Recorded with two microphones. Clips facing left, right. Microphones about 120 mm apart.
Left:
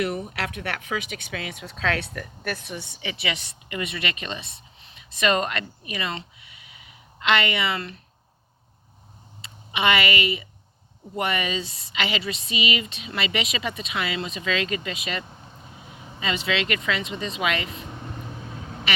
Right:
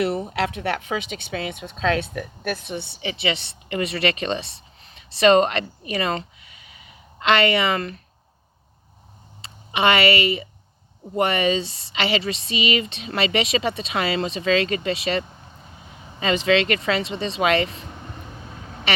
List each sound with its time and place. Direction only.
0.0 s speech: 30° right (ahead or behind)
4.8 s a sound: 35° right (ahead or behind)
9.4 s speech: 35° right (ahead or behind)
16.2 s speech: 40° right (ahead or behind)